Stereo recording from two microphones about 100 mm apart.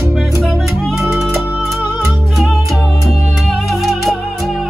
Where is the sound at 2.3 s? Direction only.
Centre (ahead or behind).